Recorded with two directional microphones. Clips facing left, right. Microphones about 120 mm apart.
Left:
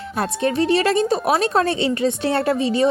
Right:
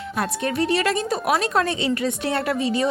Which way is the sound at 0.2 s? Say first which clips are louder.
Left 3 dB; 30° left (ahead or behind).